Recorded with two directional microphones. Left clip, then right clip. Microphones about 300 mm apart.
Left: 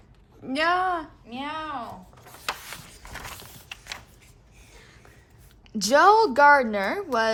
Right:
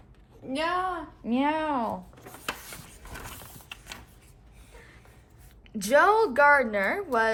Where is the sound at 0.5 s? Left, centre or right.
Left.